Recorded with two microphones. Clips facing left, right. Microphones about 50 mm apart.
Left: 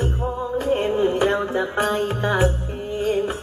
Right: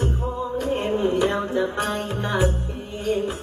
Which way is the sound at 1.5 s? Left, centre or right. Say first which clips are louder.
Left 2 dB; left.